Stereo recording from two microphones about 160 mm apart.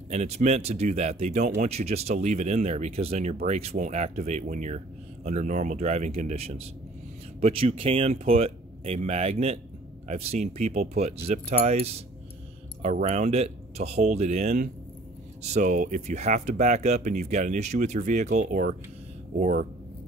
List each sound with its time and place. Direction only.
0.1 s speech: 45° right (ahead or behind)
13.0 s speech: 45° right (ahead or behind)